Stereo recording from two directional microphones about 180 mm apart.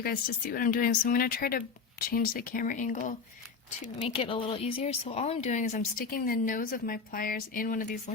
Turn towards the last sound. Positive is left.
turn(degrees=50)  # may be behind; listen again after turning